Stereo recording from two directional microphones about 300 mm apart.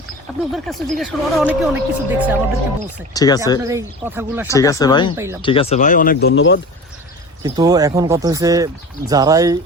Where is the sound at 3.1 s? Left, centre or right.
Centre.